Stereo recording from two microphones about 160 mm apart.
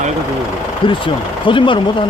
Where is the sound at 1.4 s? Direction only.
30° left (ahead or behind).